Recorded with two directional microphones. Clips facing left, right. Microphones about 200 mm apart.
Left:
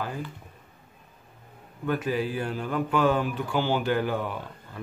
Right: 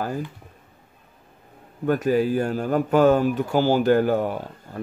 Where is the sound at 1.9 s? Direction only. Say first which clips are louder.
Right 7 dB; 45° right (ahead or behind).